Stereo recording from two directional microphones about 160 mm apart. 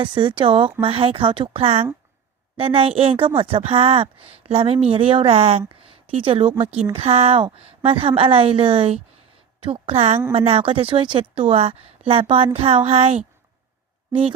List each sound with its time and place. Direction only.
0.0 s a woman's voice: 30° right (ahead or behind)